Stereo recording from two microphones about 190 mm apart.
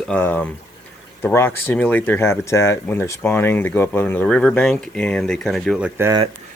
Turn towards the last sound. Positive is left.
turn(degrees=-10)  # may be behind; listen again after turning